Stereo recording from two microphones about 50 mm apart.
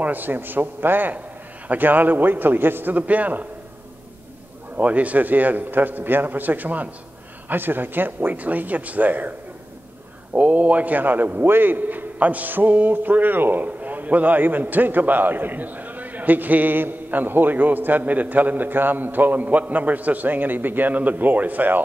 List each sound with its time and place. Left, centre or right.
0.0 s a man's voice: right
4.7 s a man's voice: right
10.3 s a man's voice: right